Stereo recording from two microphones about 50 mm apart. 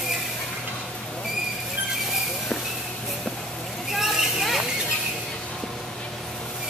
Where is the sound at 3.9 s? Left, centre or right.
Centre.